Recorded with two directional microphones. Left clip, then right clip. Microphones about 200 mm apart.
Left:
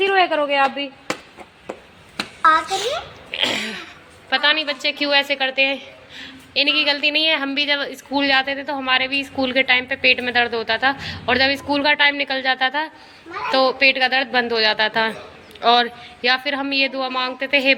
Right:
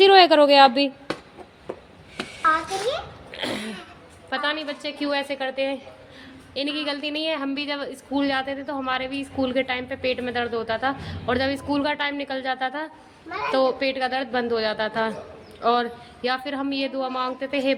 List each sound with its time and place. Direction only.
0.0 s a woman's voice: 70° right (ahead or behind)
3.4 s sneeze: 5° right (ahead or behind)
4.3 s a woman's voice: 5° right (ahead or behind)